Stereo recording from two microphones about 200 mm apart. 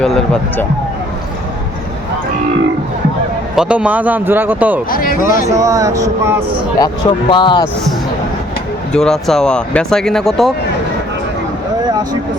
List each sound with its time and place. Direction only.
0.0 s speech: 5° left (ahead or behind)
3.5 s a man's voice: 5° right (ahead or behind)
4.9 s speech: 45° left (ahead or behind)
5.5 s a man's voice: 15° right (ahead or behind)
6.7 s speech: 20° left (ahead or behind)
8.9 s speech: 5° left (ahead or behind)